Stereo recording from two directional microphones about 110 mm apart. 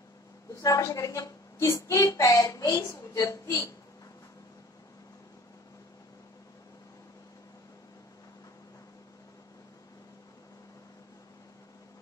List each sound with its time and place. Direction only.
0.6 s a woman's voice: 30° left (ahead or behind)